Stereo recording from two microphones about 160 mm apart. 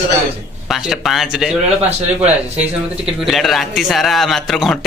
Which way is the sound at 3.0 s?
Centre (ahead or behind).